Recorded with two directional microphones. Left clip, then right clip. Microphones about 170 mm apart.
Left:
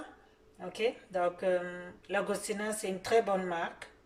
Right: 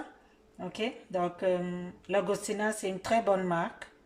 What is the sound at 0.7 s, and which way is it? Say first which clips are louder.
Speech: left 2 dB; 45° right (ahead or behind).